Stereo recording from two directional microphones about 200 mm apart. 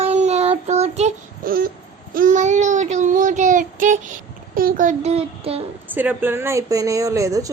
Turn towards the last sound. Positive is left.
turn(degrees=-15)  # may be behind; listen again after turning